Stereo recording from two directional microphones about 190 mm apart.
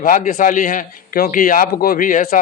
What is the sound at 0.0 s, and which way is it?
A man's voice, 45° left (ahead or behind).